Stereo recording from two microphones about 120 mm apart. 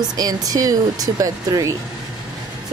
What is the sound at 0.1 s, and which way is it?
Speech, 30° right (ahead or behind).